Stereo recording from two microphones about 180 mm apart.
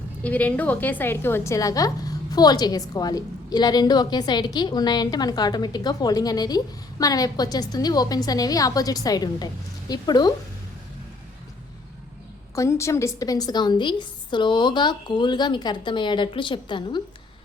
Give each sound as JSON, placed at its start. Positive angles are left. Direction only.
{"t": 0.2, "sound": "a woman's voice", "side_deg": 10}
{"t": 12.5, "sound": "a woman's voice", "side_deg": 15}